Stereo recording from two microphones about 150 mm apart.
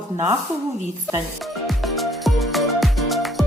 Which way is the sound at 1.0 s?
Centre (ahead or behind).